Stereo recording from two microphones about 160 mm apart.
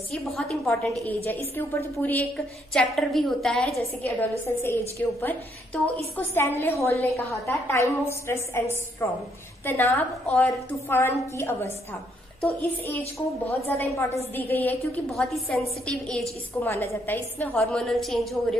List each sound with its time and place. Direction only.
0.1 s a woman's voice: centre (ahead or behind)
15.0 s a woman's voice: centre (ahead or behind)
16.6 s a woman's voice: 15° left (ahead or behind); by 18.6 s centre (ahead or behind)